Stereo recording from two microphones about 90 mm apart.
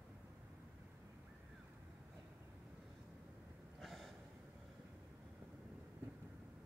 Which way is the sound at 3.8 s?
Centre (ahead or behind).